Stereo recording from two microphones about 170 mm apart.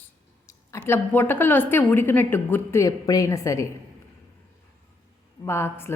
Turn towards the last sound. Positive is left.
turn(degrees=15)  # may be behind; listen again after turning